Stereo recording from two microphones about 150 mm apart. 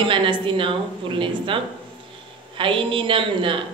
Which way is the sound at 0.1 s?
35° right (ahead or behind).